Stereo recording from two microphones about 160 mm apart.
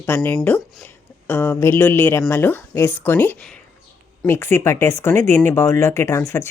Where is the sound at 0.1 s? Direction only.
15° left (ahead or behind).